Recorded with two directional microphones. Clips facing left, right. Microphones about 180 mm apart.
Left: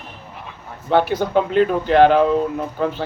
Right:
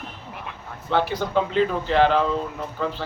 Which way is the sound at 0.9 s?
55° left (ahead or behind).